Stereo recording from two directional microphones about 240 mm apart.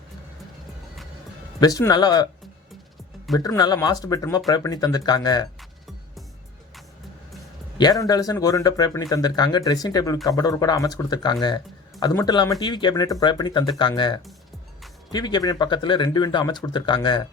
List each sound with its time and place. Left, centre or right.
1.6 s speech: centre
3.3 s speech: centre
7.8 s speech: centre